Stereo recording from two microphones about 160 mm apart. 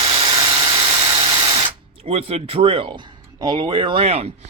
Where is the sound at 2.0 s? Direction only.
40° right (ahead or behind).